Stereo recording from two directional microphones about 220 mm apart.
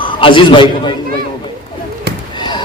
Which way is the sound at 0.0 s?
25° left (ahead or behind).